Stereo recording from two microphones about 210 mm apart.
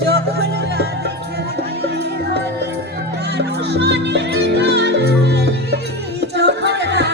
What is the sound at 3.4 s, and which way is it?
Music, 55° right (ahead or behind).